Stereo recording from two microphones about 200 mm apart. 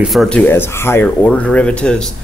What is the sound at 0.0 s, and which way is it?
A man's voice, centre (ahead or behind).